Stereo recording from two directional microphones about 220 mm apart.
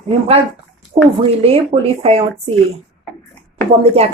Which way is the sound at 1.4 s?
25° right (ahead or behind).